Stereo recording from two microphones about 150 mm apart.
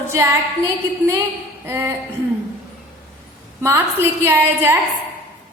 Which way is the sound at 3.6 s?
15° right (ahead or behind).